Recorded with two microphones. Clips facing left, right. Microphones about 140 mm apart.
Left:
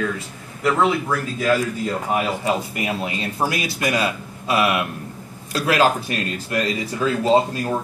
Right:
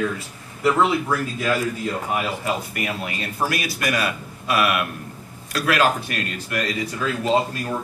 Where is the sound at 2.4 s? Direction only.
20° left (ahead or behind).